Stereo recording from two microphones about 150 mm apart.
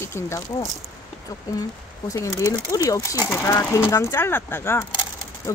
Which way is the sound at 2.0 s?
25° left (ahead or behind).